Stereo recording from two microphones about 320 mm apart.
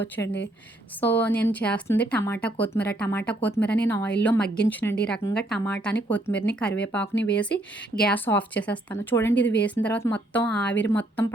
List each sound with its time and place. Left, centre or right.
0.0 s a woman's voice: centre